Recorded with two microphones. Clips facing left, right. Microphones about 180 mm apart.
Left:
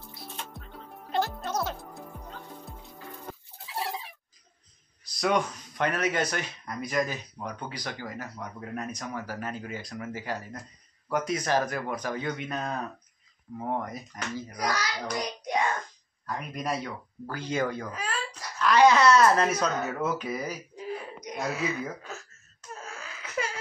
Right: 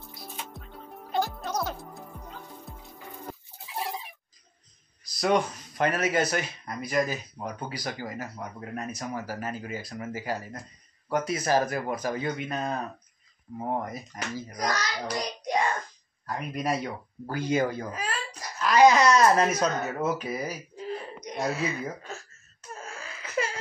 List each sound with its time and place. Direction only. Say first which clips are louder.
0.4 s music: right 1 dB; centre (ahead or behind)
5.0 s speech: right 2 dB; 5° right (ahead or behind)
14.5 s a child's voice: right 1 dB; 10° left (ahead or behind)
15.1 s hands: right 1 dB; 5° left (ahead or behind)
16.3 s a child's voice: right 3 dB; 5° right (ahead or behind)
20.7 s a sound: right 1 dB; 10° left (ahead or behind)
22.8 s a sound: right 1 dB; centre (ahead or behind)